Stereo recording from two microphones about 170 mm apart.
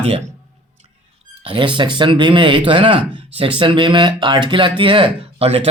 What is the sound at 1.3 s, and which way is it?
Speech, 30° right (ahead or behind).